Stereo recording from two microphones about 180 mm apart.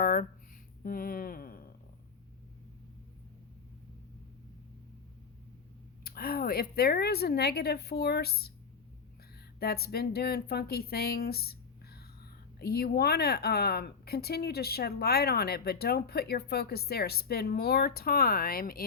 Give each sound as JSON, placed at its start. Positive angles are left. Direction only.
{"t": 0.0, "sound": "a sound", "side_deg": 50}
{"t": 0.9, "sound": "speech", "side_deg": 50}
{"t": 6.1, "sound": "speech", "side_deg": 55}
{"t": 9.6, "sound": "speech", "side_deg": 60}
{"t": 12.5, "sound": "speech", "side_deg": 60}